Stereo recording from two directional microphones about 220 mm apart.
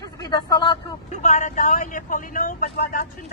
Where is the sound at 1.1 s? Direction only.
35° left (ahead or behind).